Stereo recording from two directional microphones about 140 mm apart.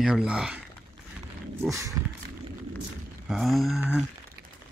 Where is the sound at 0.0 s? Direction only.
5° right (ahead or behind).